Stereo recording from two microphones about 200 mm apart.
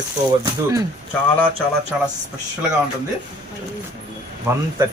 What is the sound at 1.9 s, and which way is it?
Speech, 5° right (ahead or behind).